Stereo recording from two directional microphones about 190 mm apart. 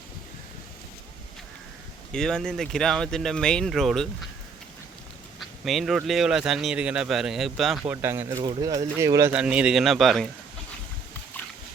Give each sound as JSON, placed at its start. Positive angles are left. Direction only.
{"t": 2.1, "sound": "speech", "side_deg": 5}
{"t": 5.4, "sound": "speech", "side_deg": 0}
{"t": 8.0, "sound": "speech", "side_deg": -10}
{"t": 9.3, "sound": "speech", "side_deg": -5}
{"t": 11.3, "sound": "pig", "side_deg": 10}